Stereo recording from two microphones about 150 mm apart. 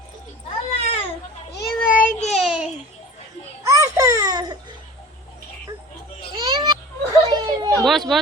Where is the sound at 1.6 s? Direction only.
90° left.